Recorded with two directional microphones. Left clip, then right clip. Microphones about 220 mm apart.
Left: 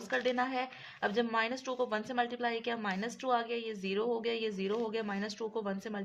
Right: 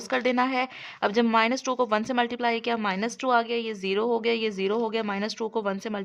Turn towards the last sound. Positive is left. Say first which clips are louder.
# right 9 dB
turn(degrees=-35)  # may be behind; listen again after turning